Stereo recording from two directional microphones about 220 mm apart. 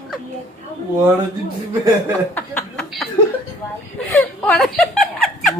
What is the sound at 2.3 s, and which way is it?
Chuckle, 5° left (ahead or behind).